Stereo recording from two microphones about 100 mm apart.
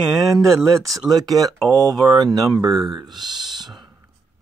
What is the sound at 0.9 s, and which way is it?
Speech, 35° right (ahead or behind).